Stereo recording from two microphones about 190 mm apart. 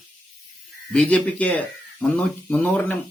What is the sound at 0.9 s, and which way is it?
Speech, 5° left (ahead or behind).